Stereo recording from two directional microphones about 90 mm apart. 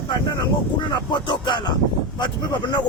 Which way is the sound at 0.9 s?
55° left (ahead or behind).